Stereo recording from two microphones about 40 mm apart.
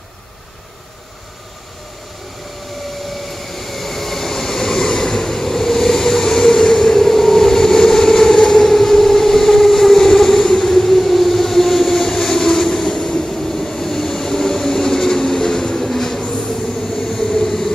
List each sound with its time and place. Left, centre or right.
3.3 s train: centre
16.2 s train: left
16.5 s train: centre
17.3 s vehicle: centre